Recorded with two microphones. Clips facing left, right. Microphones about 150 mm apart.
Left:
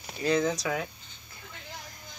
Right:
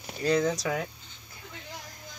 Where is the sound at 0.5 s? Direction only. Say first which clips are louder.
Right 1 dB; 35° right (ahead or behind).